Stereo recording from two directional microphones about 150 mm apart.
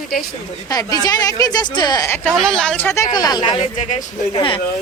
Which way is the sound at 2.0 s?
15° left (ahead or behind).